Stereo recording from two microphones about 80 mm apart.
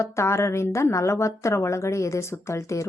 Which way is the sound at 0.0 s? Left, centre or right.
Left.